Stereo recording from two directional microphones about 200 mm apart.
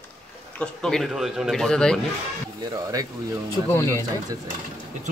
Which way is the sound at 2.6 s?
20° right (ahead or behind).